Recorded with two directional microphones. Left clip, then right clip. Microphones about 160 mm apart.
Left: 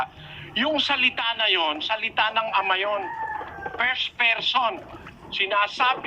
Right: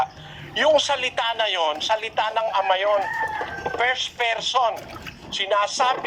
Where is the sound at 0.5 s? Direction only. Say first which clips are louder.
Right 4 dB; 45° right (ahead or behind).